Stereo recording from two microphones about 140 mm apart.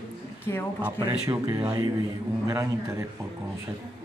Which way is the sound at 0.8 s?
10° right (ahead or behind).